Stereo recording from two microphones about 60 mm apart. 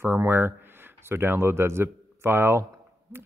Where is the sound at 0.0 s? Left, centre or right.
Right.